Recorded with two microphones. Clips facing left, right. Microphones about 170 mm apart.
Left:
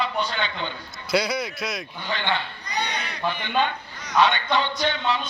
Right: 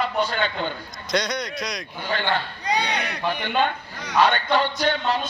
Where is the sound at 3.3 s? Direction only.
50° right (ahead or behind).